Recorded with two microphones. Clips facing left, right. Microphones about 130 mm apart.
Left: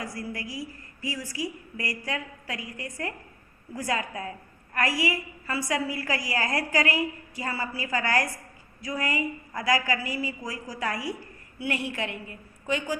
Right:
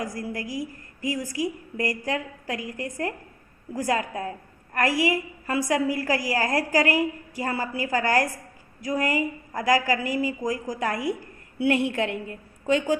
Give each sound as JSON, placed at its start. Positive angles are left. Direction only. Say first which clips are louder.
{"t": 0.0, "sound": "a woman's voice", "louder": "right 4 dB", "side_deg": -45}